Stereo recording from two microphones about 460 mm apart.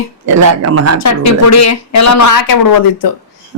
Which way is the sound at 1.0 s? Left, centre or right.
Left.